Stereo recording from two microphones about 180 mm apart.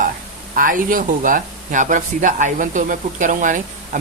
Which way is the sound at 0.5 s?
50° right (ahead or behind).